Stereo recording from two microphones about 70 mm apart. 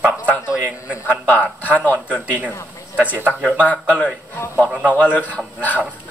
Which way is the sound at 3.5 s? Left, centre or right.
Left.